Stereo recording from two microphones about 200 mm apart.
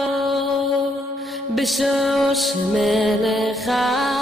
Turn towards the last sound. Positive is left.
turn(degrees=0)  # may be behind; listen again after turning